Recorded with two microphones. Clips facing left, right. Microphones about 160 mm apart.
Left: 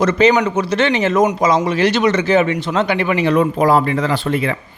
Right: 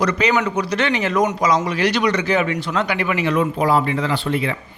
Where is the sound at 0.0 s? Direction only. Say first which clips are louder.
Left 5 dB; 25° left (ahead or behind).